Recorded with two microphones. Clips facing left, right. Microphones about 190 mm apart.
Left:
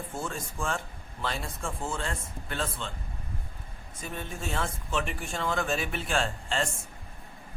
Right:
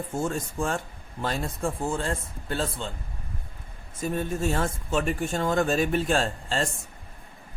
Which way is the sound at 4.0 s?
45° right (ahead or behind).